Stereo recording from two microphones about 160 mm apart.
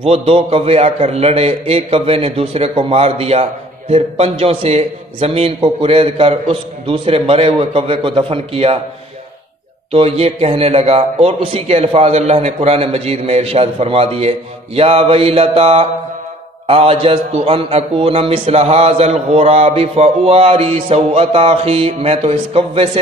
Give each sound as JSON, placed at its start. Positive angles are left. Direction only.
{"t": 0.0, "sound": "a man's voice", "side_deg": -35}
{"t": 9.9, "sound": "a man's voice", "side_deg": -40}